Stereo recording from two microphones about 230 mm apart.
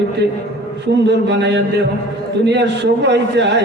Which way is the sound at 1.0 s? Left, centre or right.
Right.